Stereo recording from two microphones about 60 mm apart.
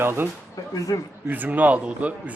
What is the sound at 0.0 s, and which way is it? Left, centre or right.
Speech, right.